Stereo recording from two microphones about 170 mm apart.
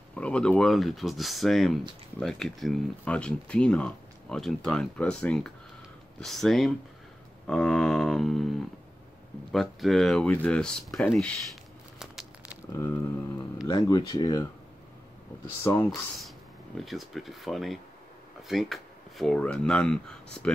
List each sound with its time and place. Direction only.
0.1 s speech: 5° left (ahead or behind)
9.5 s speech: centre (ahead or behind)
12.0 s a sound: 5° right (ahead or behind)
12.7 s speech: 15° left (ahead or behind)
15.6 s speech: 15° left (ahead or behind)
16.2 s speech: centre (ahead or behind)